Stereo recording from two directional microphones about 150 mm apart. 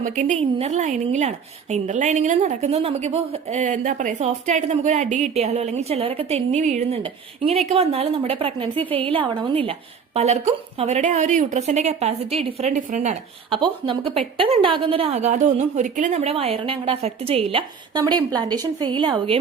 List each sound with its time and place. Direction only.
0.0 s a woman's voice: 55° right (ahead or behind)
4.2 s a woman's voice: 50° right (ahead or behind)
7.0 s a woman's voice: 40° right (ahead or behind)
13.5 s a woman's voice: 35° right (ahead or behind)